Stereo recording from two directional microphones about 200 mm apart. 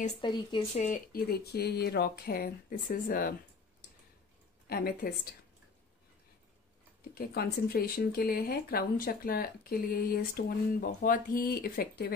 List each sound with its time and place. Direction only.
0.2 s speech: 25° left (ahead or behind); by 3.3 s 45° left (ahead or behind)
4.6 s speech: 50° left (ahead or behind)
7.2 s speech: 50° left (ahead or behind)